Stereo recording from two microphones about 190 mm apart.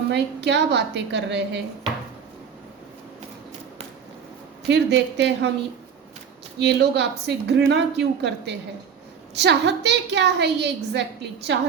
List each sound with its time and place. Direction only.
0.1 s a woman's voice: 65° right (ahead or behind)
4.7 s a woman's voice: 65° right (ahead or behind)
6.6 s a woman's voice: 65° right (ahead or behind)